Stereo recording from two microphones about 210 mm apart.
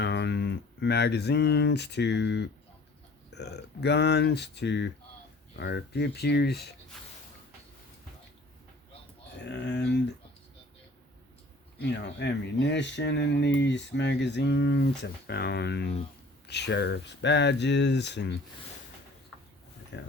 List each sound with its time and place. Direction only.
0.0 s speech: 55° left (ahead or behind)
9.4 s speech: 55° left (ahead or behind)
11.8 s speech: 55° left (ahead or behind)
19.9 s speech: 60° left (ahead or behind)